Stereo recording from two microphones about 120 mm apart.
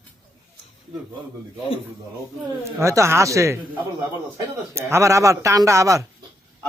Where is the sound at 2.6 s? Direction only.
25° right (ahead or behind).